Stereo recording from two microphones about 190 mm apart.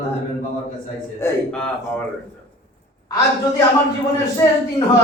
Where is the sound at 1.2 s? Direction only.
15° left (ahead or behind).